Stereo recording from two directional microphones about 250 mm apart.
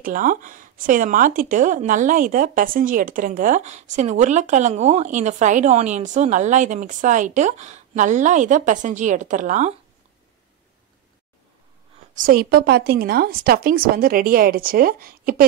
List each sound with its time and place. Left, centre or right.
0.0 s speech: right
12.1 s a woman's voice: right